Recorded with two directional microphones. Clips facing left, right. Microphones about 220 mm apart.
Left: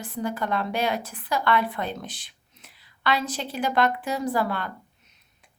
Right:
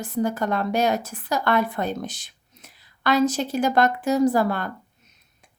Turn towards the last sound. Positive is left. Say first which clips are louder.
# right 6 dB
turn(degrees=-45)  # may be behind; listen again after turning